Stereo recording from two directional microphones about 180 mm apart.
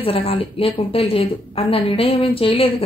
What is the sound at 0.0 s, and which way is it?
A woman's voice, 30° left (ahead or behind).